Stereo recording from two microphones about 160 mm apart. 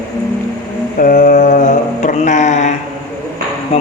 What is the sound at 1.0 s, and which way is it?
Mantra, 60° left (ahead or behind).